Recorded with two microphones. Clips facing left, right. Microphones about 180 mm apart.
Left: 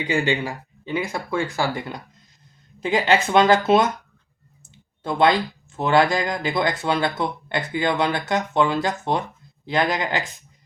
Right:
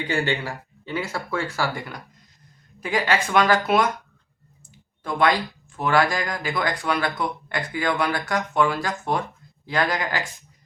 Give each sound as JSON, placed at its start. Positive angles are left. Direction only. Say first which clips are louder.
{"t": 0.1, "sound": "speech", "louder": "left 3 dB", "side_deg": 15}